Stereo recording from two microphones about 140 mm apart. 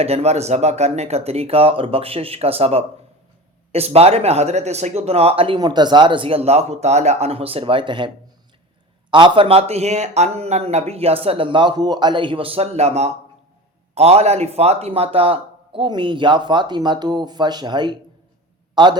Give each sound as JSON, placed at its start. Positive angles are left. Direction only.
{"t": 0.0, "sound": "speech", "side_deg": -50}
{"t": 5.5, "sound": "a man's voice", "side_deg": -30}